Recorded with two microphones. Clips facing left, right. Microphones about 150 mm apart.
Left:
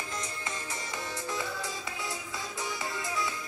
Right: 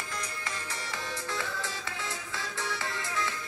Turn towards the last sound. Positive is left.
turn(degrees=15)  # may be behind; listen again after turning